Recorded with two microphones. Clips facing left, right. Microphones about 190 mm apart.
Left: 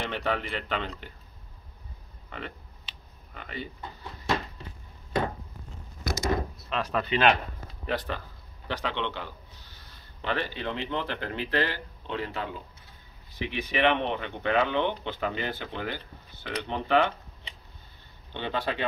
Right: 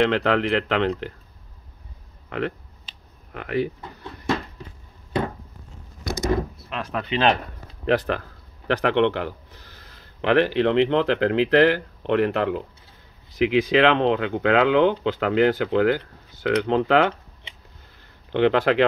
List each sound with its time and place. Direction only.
0.0 s speech: 90° right
2.2 s a sound: 80° right
3.3 s speech: 75° right (ahead or behind)
6.7 s speech: 10° right (ahead or behind)
7.1 s speech: 30° right (ahead or behind)
7.8 s speech: 90° right
8.6 s a man's voice: 75° right (ahead or behind)
10.2 s speech: 90° right
18.3 s speech: 90° right